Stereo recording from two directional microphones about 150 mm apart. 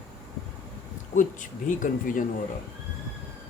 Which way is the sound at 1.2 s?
60° left (ahead or behind).